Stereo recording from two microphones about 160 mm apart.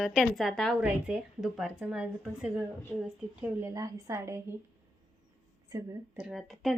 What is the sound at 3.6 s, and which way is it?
Speech, 20° right (ahead or behind).